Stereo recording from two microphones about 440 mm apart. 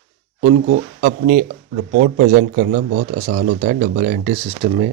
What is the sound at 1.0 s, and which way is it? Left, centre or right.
Speech, centre.